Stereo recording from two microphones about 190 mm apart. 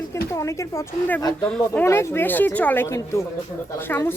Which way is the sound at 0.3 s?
15° left (ahead or behind).